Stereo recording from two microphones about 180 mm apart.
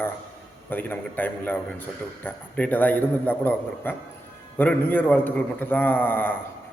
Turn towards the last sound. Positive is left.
turn(degrees=10)  # may be behind; listen again after turning